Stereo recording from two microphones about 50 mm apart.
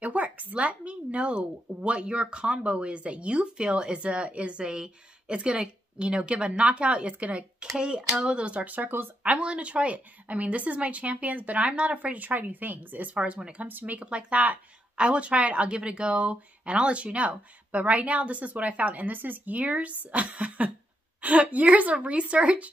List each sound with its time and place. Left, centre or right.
0.0 s speech: right
13.7 s speech: right
13.9 s speech: right